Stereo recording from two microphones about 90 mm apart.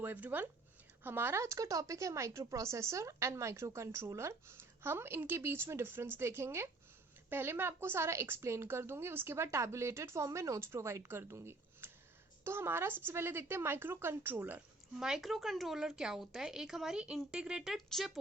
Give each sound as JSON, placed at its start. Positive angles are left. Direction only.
{"t": 0.0, "sound": "speech", "side_deg": -20}
{"t": 14.9, "sound": "speech", "side_deg": -5}